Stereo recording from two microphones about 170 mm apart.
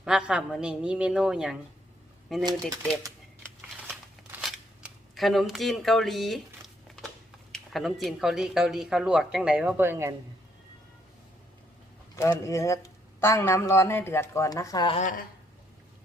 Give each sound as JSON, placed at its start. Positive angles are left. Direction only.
{"t": 0.0, "sound": "speech", "side_deg": -5}
{"t": 2.4, "sound": "speech", "side_deg": -25}
{"t": 3.8, "sound": "scissors", "side_deg": 0}
{"t": 7.5, "sound": "speech", "side_deg": 0}
{"t": 12.1, "sound": "speech", "side_deg": 20}
{"t": 14.9, "sound": "a woman's voice", "side_deg": 50}